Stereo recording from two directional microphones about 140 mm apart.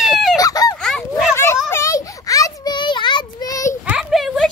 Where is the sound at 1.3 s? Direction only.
20° left (ahead or behind).